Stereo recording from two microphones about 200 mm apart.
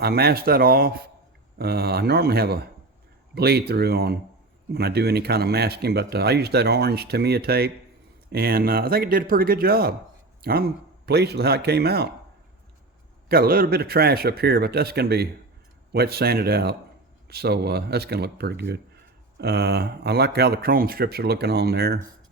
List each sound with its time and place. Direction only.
0.0 s speech: 50° right (ahead or behind)
13.2 s speech: 50° right (ahead or behind)